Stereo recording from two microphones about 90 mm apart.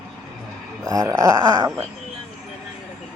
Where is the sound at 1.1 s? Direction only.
40° right (ahead or behind).